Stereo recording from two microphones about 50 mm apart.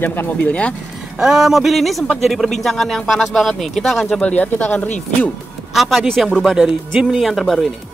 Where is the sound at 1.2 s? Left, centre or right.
Centre.